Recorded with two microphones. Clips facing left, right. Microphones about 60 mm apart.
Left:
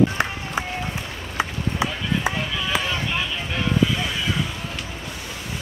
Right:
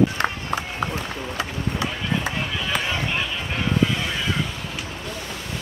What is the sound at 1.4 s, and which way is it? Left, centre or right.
Run, centre.